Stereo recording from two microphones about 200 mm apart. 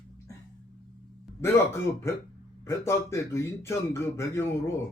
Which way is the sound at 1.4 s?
15° left (ahead or behind).